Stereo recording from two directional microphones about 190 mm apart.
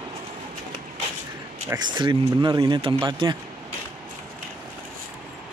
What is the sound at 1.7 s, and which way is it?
Speech, 20° right (ahead or behind).